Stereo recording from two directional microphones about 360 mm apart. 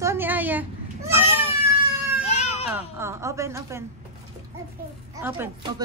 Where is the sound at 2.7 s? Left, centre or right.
Centre.